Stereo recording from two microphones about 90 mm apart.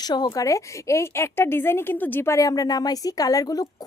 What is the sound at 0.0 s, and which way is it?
Speech, 50° left (ahead or behind).